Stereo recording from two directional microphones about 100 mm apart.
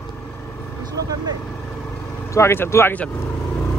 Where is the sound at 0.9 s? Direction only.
40° right (ahead or behind).